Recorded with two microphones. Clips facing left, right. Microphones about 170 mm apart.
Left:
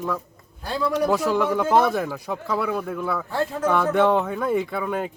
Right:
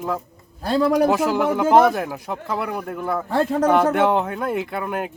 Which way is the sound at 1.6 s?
5° right (ahead or behind).